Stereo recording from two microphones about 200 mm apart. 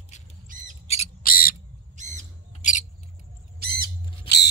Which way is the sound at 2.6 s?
40° left (ahead or behind).